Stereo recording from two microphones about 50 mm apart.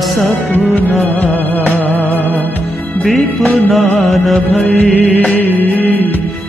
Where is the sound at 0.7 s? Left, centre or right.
Left.